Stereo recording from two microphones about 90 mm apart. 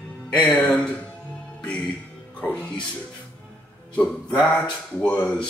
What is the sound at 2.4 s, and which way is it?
Speech, 15° left (ahead or behind).